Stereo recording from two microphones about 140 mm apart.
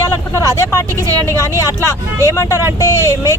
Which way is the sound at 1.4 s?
20° left (ahead or behind).